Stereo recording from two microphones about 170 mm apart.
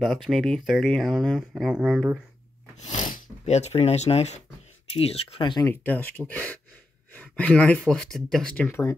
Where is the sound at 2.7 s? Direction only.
45° left (ahead or behind).